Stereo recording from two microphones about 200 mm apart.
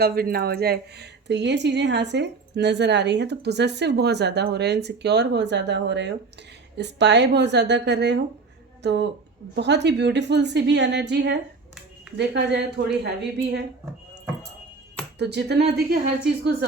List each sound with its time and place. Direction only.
0.0 s a woman's voice: 50° right (ahead or behind)
15.2 s a woman's voice: 55° right (ahead or behind)